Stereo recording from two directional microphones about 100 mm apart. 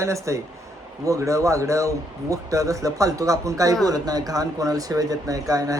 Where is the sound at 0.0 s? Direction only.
30° right (ahead or behind).